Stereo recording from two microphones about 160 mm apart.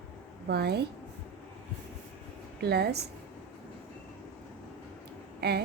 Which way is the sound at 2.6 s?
90° right.